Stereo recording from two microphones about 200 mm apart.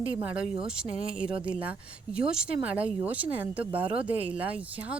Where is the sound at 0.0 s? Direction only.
5° right (ahead or behind).